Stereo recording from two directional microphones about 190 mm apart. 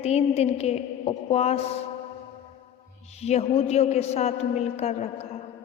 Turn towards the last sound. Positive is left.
turn(degrees=35)  # may be behind; listen again after turning